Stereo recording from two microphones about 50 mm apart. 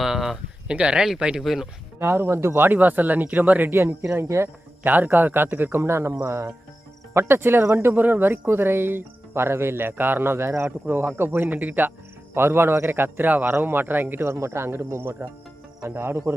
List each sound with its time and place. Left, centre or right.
0.0 s a sound: centre
0.7 s speech: centre
1.4 s speech: centre
2.0 s speech: right
2.7 s speech: right
4.1 s speech: right
4.8 s speech: right
7.1 s speech: right
8.0 s speech: right
10.3 s speech: right
10.7 s speech: right
12.3 s speech: right